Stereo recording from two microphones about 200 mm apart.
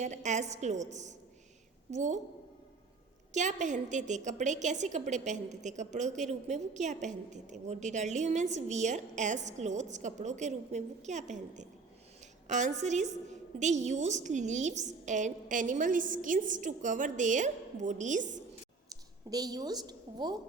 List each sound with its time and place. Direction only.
0.0 s a woman's voice: 35° right (ahead or behind)
3.3 s a woman's voice: 35° right (ahead or behind)
18.9 s a woman's voice: 20° right (ahead or behind)